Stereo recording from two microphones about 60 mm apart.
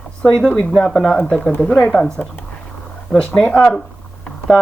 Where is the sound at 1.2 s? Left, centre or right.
Centre.